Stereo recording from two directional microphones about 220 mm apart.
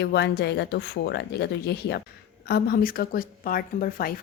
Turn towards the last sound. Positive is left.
turn(degrees=40)  # may be behind; listen again after turning